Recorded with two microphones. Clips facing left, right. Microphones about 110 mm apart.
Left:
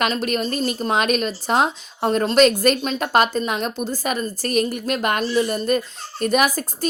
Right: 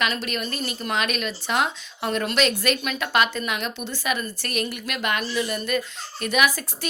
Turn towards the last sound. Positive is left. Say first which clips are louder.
# left 4 dB
turn(degrees=40)  # may be behind; listen again after turning